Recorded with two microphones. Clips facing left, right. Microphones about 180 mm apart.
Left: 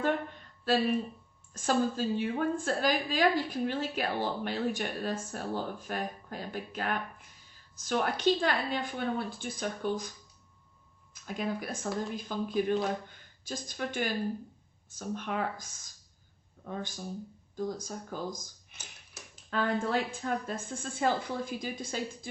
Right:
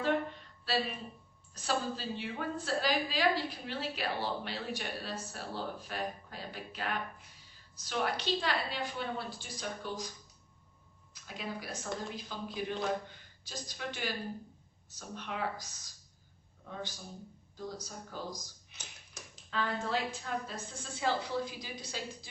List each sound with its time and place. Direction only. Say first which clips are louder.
0.6 s a woman's voice: left 7 dB; 50° left (ahead or behind)
11.1 s a woman's voice: left 7 dB; 50° left (ahead or behind)